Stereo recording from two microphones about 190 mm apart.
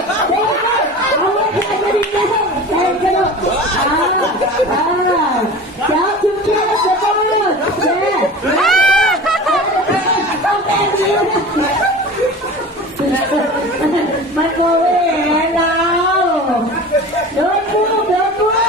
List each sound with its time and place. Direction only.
8.6 s run: 5° left (ahead or behind)